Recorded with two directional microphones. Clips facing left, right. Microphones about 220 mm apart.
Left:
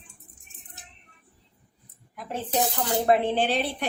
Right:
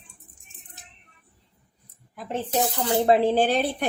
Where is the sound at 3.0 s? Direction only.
30° right (ahead or behind).